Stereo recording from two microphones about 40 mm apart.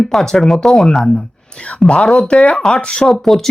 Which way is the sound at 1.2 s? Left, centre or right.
Left.